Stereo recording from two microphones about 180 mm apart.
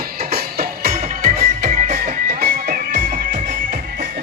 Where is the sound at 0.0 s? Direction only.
60° right (ahead or behind).